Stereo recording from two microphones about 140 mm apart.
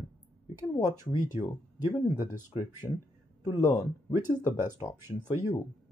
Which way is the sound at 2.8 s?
20° left (ahead or behind).